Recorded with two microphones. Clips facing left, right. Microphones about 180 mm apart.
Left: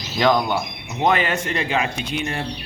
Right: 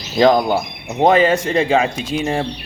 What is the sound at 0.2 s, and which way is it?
Speech, 35° right (ahead or behind).